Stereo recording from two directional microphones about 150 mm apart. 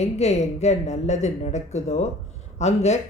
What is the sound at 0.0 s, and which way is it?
Speech, 50° left (ahead or behind).